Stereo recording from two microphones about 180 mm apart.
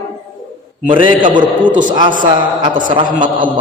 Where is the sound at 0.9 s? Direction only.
30° right (ahead or behind).